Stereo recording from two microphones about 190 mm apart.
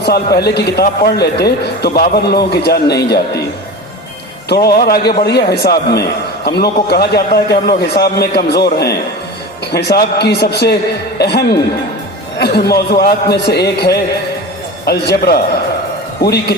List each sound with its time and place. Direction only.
0.0 s a man's voice: 55° left (ahead or behind)
4.4 s a man's voice: 55° left (ahead or behind)